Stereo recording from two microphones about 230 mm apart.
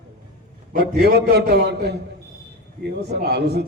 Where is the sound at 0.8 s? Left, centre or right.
Right.